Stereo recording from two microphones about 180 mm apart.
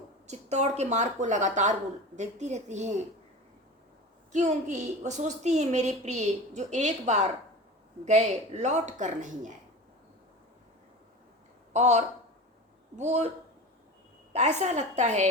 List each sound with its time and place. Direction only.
0.3 s a woman's voice: 40° right (ahead or behind)
4.3 s a woman's voice: 40° right (ahead or behind)
11.7 s a woman's voice: 40° right (ahead or behind)
14.3 s a woman's voice: 40° right (ahead or behind)